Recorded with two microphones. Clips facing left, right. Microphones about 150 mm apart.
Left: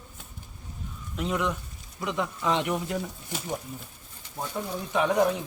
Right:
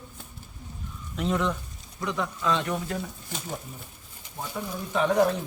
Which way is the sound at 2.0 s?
20° left (ahead or behind).